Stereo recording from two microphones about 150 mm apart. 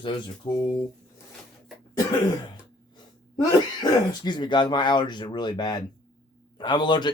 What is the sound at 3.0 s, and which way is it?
Speech, 25° left (ahead or behind).